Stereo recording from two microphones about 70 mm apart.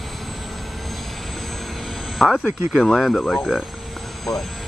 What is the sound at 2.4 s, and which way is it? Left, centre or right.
Speech, centre.